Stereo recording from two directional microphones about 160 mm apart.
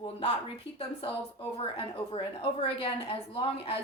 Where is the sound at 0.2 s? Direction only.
35° left (ahead or behind).